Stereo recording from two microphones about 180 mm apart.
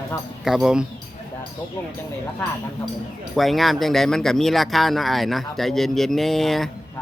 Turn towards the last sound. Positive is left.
turn(degrees=0)  # may be behind; listen again after turning